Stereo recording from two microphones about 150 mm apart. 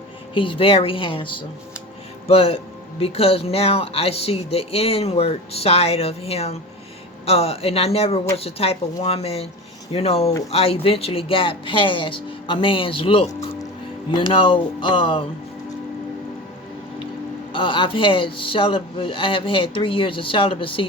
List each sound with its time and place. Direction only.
0.3 s speech: 35° left (ahead or behind)
17.5 s speech: 35° left (ahead or behind)